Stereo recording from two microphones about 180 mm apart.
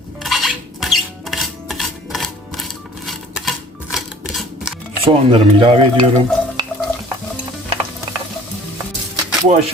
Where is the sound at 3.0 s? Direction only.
Centre (ahead or behind).